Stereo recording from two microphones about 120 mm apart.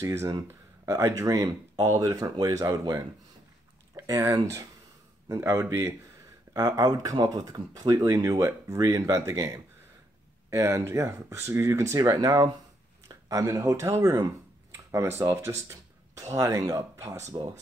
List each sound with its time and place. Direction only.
0.0 s speech: 25° right (ahead or behind)
10.5 s speech: 25° right (ahead or behind)